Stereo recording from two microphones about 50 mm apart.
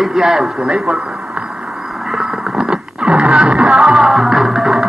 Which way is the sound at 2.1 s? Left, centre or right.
Centre.